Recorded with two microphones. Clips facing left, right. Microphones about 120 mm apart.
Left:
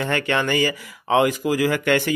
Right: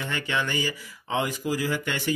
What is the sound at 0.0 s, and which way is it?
Speech, 65° left (ahead or behind).